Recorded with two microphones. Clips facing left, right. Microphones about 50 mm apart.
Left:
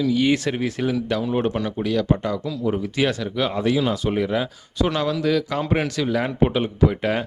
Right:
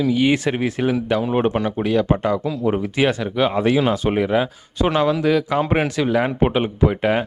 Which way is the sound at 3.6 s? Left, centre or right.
Right.